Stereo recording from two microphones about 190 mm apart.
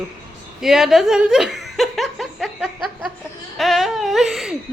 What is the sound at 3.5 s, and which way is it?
Baby cry, centre (ahead or behind).